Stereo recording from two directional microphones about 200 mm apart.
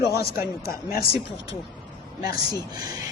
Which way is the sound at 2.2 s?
20° right (ahead or behind).